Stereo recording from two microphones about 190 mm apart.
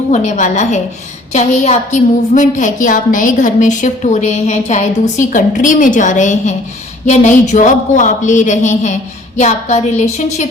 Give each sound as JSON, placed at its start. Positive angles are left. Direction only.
{"t": 0.1, "sound": "a woman's voice", "side_deg": 40}